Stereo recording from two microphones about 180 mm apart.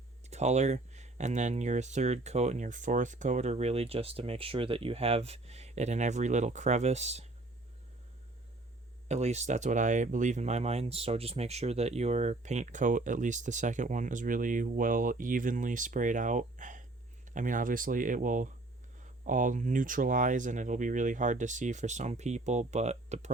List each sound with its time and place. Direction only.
0.3 s speech: 40° right (ahead or behind)
9.0 s speech: 40° right (ahead or behind)